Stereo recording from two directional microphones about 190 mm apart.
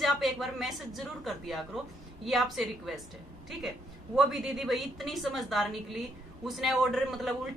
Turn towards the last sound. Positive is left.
turn(degrees=0)  # may be behind; listen again after turning